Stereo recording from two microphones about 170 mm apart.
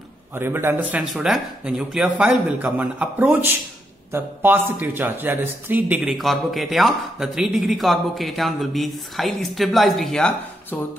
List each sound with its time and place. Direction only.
0.3 s a man's voice: 15° right (ahead or behind); by 10.8 s 5° left (ahead or behind)